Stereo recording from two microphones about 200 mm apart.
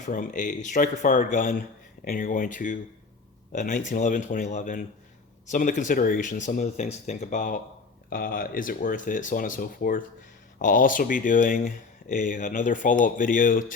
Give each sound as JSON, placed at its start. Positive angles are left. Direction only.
{"t": 0.0, "sound": "speech", "side_deg": 40}